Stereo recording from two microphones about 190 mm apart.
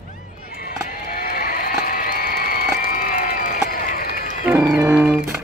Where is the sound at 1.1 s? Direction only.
50° left (ahead or behind).